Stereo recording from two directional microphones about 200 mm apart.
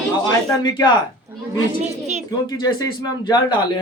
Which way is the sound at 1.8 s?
35° right (ahead or behind).